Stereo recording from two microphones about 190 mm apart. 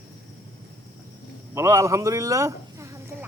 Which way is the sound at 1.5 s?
15° right (ahead or behind).